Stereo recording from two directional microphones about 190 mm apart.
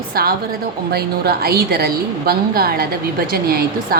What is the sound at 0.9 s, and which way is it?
A woman's voice, 55° right (ahead or behind).